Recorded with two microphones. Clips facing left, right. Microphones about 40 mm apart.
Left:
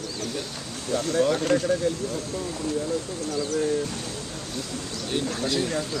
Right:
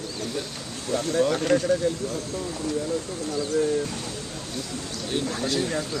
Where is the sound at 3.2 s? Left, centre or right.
Right.